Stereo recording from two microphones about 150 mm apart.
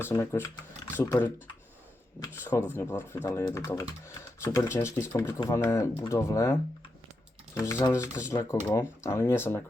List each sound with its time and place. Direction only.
0.0 s speech: 15° left (ahead or behind)